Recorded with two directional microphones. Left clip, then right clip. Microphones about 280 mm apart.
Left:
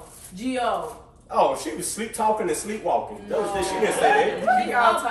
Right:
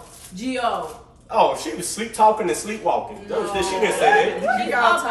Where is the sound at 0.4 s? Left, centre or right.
Centre.